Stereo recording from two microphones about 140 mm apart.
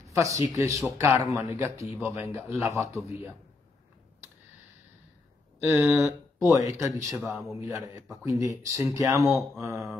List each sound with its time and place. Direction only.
0.1 s a man's voice: 20° right (ahead or behind)
5.7 s speech: centre (ahead or behind)
6.4 s speech: 20° right (ahead or behind)
7.1 s speech: 5° right (ahead or behind)
7.6 s speech: 20° right (ahead or behind)